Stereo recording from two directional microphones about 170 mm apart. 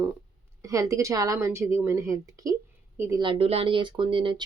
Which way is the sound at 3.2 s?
35° right (ahead or behind).